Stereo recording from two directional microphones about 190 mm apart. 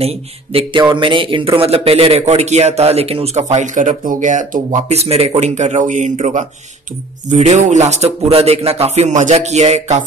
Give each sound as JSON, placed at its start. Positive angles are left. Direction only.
{"t": 0.0, "sound": "speech", "side_deg": -30}